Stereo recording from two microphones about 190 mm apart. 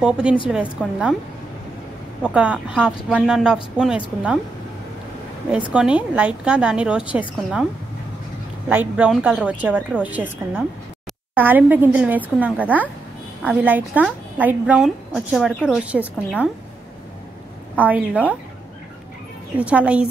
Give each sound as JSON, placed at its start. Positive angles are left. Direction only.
{"t": 0.0, "sound": "a woman's voice", "side_deg": -5}
{"t": 2.2, "sound": "a woman's voice", "side_deg": -5}
{"t": 5.7, "sound": "a woman's voice", "side_deg": -5}
{"t": 8.6, "sound": "a woman's voice", "side_deg": -10}
{"t": 17.7, "sound": "a woman's voice", "side_deg": -10}
{"t": 19.6, "sound": "a woman's voice", "side_deg": -5}